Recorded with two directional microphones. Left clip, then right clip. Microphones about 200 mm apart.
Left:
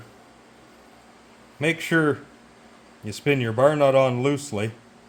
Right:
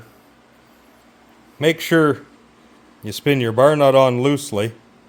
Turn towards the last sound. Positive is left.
turn(degrees=-50)  # may be behind; listen again after turning